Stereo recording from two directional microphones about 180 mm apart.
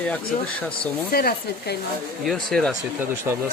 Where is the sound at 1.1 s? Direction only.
55° left (ahead or behind).